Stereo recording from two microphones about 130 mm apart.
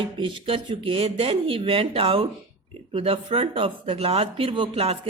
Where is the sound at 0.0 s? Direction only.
40° right (ahead or behind).